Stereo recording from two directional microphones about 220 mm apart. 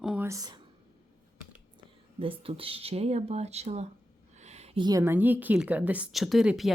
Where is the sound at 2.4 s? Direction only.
25° right (ahead or behind).